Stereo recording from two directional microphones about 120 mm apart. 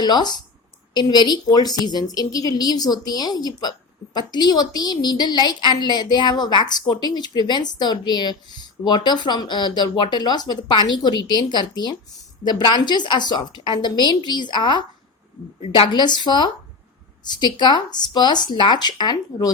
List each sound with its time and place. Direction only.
0.0 s a woman's voice: 35° left (ahead or behind)